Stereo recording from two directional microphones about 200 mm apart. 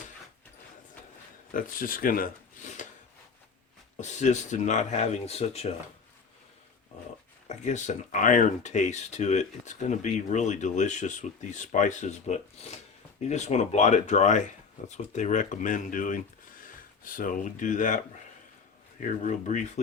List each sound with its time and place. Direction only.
1.5 s speech: 45° left (ahead or behind)
4.0 s speech: 35° left (ahead or behind)
7.4 s speech: 35° left (ahead or behind)